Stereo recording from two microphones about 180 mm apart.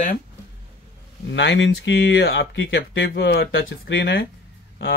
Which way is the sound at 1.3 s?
85° left.